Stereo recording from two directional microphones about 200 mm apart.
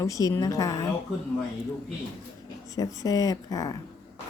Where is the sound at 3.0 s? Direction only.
15° left (ahead or behind).